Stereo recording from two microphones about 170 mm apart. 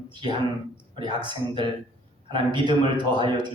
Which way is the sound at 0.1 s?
25° right (ahead or behind).